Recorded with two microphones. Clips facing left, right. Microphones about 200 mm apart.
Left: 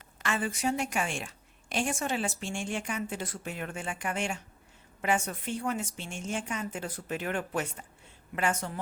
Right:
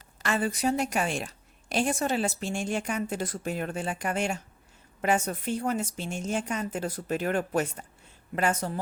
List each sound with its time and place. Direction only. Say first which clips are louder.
0.2 s a woman's voice: right 4 dB; 40° right (ahead or behind)